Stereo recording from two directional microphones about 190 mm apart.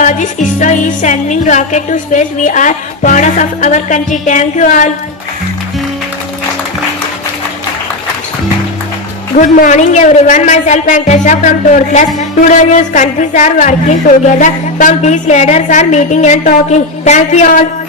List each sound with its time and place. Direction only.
0.0 s a woman's voice: 40° left (ahead or behind)
9.4 s a woman's voice: 40° left (ahead or behind)